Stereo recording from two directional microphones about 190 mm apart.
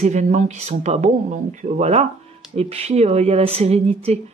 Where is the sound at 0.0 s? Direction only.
40° right (ahead or behind).